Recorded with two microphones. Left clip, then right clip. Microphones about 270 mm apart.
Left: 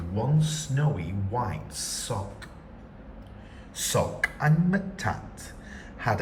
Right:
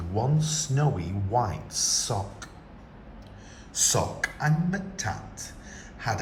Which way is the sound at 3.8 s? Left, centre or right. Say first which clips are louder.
Even; centre.